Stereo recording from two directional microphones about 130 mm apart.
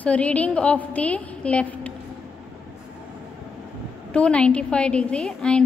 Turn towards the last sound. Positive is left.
turn(degrees=5)  # may be behind; listen again after turning